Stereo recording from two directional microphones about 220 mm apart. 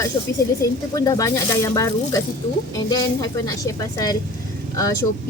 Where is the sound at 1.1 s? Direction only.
15° left (ahead or behind).